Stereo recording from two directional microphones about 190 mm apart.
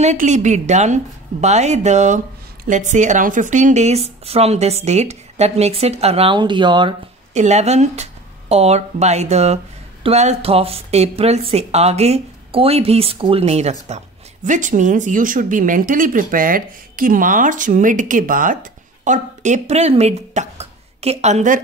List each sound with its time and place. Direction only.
0.0 s speech: 40° right (ahead or behind)
7.3 s speech: 35° right (ahead or behind)